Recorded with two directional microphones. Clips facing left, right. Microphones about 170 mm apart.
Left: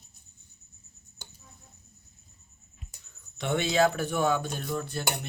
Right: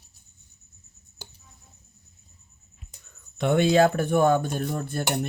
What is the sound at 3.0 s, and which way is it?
Speech, 55° right (ahead or behind).